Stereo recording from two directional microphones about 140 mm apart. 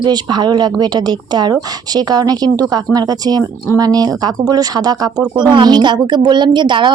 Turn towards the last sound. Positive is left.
turn(degrees=-35)  # may be behind; listen again after turning